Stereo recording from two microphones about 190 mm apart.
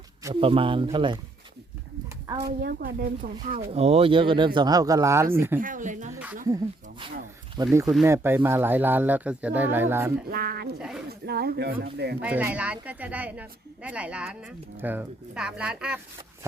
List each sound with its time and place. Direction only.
0.3 s speech: 30° right (ahead or behind)
2.2 s a woman's voice: 20° right (ahead or behind)
2.5 s speech: 50° right (ahead or behind)
3.7 s speech: 30° right (ahead or behind); by 5.5 s 15° right (ahead or behind)
5.5 s speech: 45° right (ahead or behind)
7.5 s a woman's voice: 20° right (ahead or behind)
10.2 s speech: 55° right (ahead or behind)
10.8 s speech: 5° right (ahead or behind)
11.3 s speech: 55° right (ahead or behind)
12.2 s a woman's voice: 10° right (ahead or behind)